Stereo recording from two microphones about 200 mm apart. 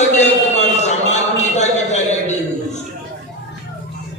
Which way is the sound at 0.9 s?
35° left (ahead or behind).